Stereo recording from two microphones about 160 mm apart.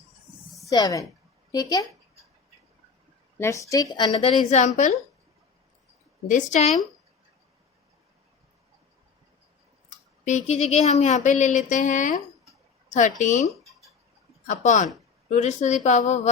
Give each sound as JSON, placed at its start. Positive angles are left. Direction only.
{"t": 0.7, "sound": "a woman's voice", "side_deg": 20}
{"t": 3.3, "sound": "a woman's voice", "side_deg": 15}
{"t": 6.2, "sound": "speech", "side_deg": 50}
{"t": 10.2, "sound": "speech", "side_deg": 45}